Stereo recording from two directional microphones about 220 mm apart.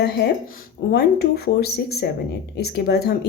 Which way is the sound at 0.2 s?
50° left (ahead or behind).